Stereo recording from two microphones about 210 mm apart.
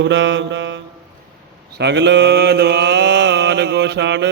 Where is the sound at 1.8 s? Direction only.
55° right (ahead or behind).